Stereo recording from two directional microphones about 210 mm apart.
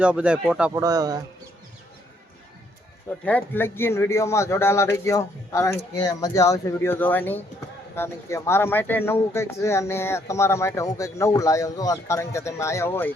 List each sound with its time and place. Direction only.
0.0 s speech: 5° right (ahead or behind)
0.7 s speech: 15° right (ahead or behind)
3.2 s speech: 10° left (ahead or behind)